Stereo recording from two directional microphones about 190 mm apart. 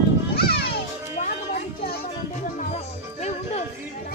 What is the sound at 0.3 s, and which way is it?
Music, 55° left (ahead or behind).